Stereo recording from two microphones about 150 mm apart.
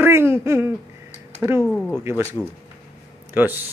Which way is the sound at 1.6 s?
10° left (ahead or behind).